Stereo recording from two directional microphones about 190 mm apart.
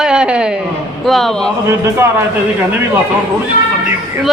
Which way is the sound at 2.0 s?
10° right (ahead or behind).